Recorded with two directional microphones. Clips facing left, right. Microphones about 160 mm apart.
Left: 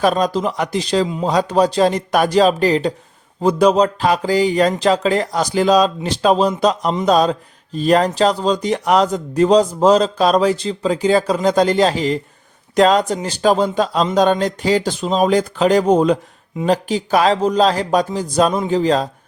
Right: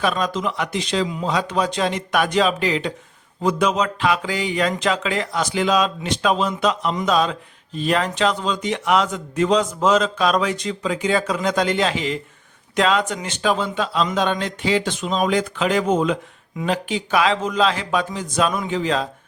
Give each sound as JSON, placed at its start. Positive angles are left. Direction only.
{"t": 0.0, "sound": "speech", "side_deg": 40}